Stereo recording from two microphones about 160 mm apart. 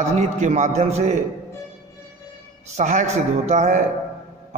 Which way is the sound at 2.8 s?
45° right (ahead or behind).